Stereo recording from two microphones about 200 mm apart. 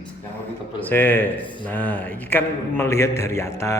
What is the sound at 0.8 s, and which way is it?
A man's voice, 10° left (ahead or behind).